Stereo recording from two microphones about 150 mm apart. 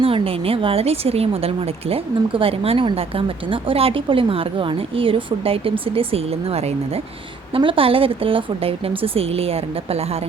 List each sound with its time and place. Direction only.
0.0 s a woman's voice: 40° right (ahead or behind)